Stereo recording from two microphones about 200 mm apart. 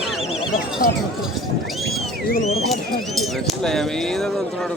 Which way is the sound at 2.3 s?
35° left (ahead or behind).